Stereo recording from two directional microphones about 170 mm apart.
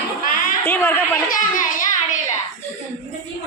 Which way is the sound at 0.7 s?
15° left (ahead or behind).